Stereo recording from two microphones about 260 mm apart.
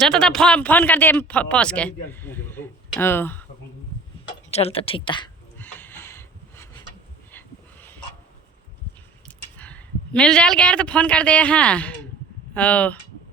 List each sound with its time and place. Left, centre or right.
0.0 s speech: centre
4.5 s a woman's voice: left
5.5 s a sound: centre
7.3 s dog: centre
9.2 s speech: centre